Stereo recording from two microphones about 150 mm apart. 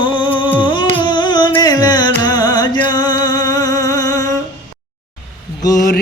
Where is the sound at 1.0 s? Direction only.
30° left (ahead or behind).